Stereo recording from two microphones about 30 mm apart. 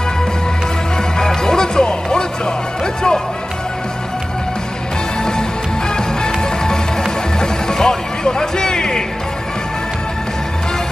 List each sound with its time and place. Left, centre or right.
1.1 s music: left
5.9 s music: left